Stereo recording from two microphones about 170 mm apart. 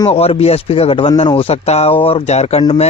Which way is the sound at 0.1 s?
35° left (ahead or behind).